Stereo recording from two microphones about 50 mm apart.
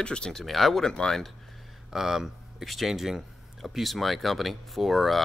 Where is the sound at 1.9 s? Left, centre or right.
Centre.